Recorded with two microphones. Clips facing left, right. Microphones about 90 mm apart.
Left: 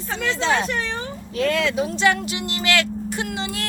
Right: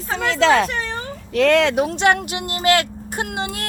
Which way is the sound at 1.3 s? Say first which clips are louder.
Right 6 dB; 70° right (ahead or behind).